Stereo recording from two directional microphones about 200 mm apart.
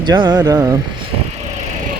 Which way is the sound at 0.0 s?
20° right (ahead or behind).